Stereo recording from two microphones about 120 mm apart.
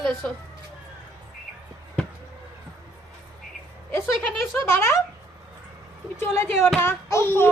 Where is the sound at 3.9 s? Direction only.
20° left (ahead or behind).